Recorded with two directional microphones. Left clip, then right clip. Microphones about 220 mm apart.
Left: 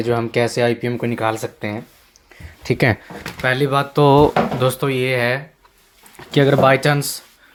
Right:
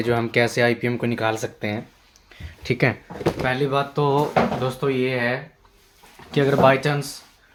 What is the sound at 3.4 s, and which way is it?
Speech, 50° left (ahead or behind).